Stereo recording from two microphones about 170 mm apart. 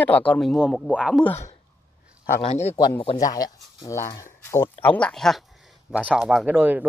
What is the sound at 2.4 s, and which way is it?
Speech, 35° left (ahead or behind).